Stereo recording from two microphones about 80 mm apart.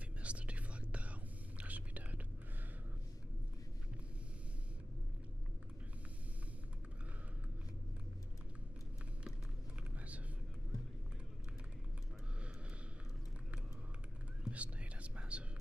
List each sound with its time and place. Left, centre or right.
0.2 s whispering: centre
9.9 s whispering: centre
14.4 s whispering: centre